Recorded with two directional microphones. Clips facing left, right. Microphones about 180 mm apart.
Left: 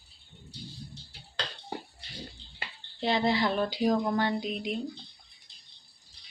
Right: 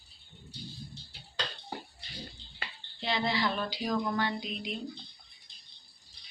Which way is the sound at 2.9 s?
45° left (ahead or behind).